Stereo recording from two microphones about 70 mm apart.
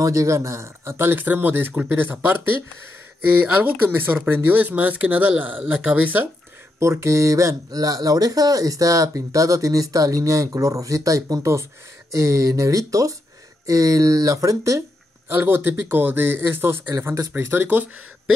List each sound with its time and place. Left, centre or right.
0.0 s speech: right
6.8 s speech: right
15.2 s speech: right